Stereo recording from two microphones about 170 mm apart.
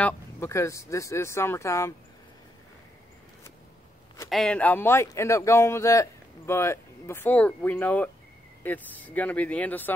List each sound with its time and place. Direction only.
0.0 s a man's voice: 15° left (ahead or behind)
4.3 s a man's voice: 5° left (ahead or behind)